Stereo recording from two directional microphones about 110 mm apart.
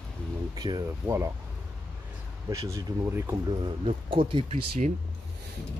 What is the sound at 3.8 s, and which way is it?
Speech, 55° right (ahead or behind).